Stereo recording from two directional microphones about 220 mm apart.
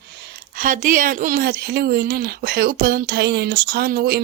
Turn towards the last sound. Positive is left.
turn(degrees=-45)  # may be behind; listen again after turning